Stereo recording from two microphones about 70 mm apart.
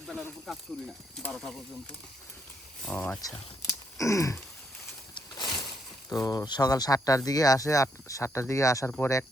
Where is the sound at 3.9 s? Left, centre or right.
Left.